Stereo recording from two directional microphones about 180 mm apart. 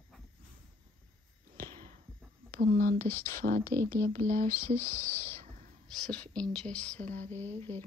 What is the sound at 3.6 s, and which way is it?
Speech, 10° left (ahead or behind).